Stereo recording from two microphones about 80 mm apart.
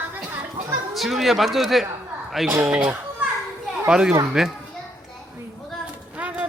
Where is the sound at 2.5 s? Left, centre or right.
Right.